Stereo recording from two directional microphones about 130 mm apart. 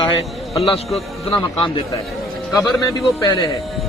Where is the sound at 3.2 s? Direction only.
30° left (ahead or behind).